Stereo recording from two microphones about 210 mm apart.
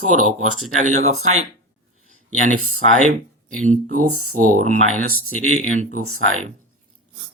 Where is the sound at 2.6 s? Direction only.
90° right.